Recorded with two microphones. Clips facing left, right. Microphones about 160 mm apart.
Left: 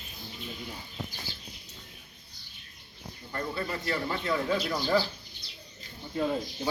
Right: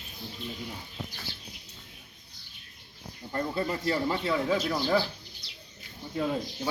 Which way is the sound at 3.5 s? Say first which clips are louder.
Right 4 dB; 25° right (ahead or behind).